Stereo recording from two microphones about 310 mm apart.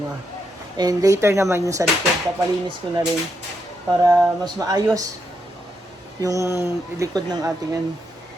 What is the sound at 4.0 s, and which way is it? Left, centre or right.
Speech, centre.